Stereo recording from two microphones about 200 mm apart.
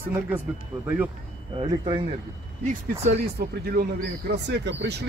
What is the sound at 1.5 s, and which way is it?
Speech, 25° right (ahead or behind).